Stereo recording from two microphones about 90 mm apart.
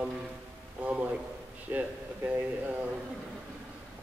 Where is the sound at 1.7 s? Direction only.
25° right (ahead or behind).